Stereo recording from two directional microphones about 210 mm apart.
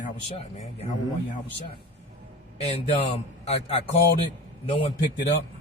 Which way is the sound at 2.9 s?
25° left (ahead or behind).